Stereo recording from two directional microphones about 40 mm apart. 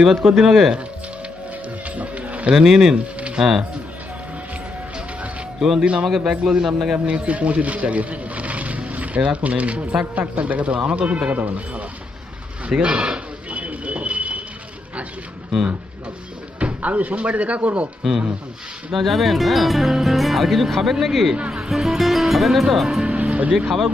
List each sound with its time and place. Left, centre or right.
0.0 s speech: centre
2.0 s mechanisms: right
2.5 s speech: centre
2.9 s music: right
5.5 s speech: centre
5.8 s speech: right
6.1 s speech: centre
6.9 s speech: right
12.8 s a sound: right
16.6 s speech: right
18.9 s speech: centre
21.5 s speech: centre
21.9 s speech: centre
23.0 s music: right